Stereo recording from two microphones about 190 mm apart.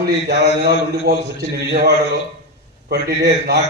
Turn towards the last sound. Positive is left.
turn(degrees=-60)  # may be behind; listen again after turning